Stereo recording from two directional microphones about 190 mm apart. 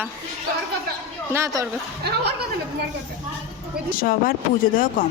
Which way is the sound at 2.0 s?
60° right (ahead or behind).